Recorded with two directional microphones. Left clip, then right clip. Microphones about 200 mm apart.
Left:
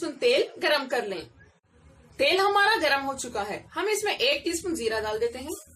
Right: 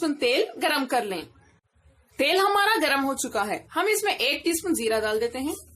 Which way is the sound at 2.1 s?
55° right (ahead or behind).